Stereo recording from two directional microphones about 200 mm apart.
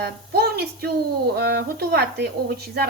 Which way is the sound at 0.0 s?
50° right (ahead or behind).